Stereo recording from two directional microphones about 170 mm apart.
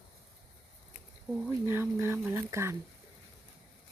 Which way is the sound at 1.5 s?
15° right (ahead or behind).